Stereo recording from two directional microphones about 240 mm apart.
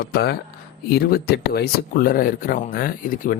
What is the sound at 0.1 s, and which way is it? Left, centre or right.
Speech, left.